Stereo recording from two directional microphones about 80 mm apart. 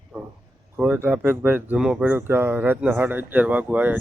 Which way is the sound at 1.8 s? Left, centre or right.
Centre.